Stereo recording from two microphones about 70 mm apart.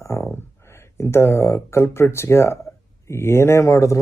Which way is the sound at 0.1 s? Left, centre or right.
Left.